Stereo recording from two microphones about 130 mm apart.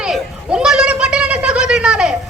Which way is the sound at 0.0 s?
5° right (ahead or behind).